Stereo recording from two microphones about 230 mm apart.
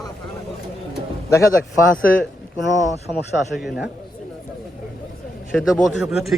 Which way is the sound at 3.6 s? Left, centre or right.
Centre.